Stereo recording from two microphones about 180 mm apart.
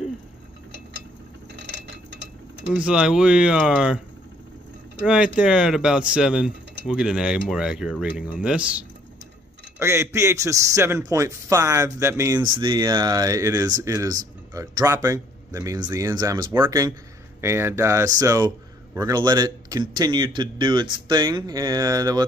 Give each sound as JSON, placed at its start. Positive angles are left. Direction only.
{"t": 2.7, "sound": "speech", "side_deg": -5}
{"t": 5.0, "sound": "speech", "side_deg": -5}